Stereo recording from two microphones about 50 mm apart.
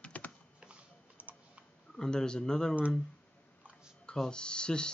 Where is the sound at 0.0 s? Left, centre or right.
Left.